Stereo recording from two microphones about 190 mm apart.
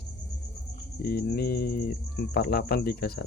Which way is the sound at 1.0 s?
55° left (ahead or behind).